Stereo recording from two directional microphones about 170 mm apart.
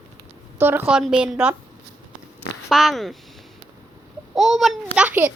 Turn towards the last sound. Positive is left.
turn(degrees=-10)  # may be behind; listen again after turning